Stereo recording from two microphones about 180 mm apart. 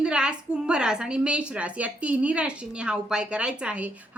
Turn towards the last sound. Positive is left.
turn(degrees=-5)  # may be behind; listen again after turning